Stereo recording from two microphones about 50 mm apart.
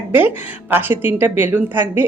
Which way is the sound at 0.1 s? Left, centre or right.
Right.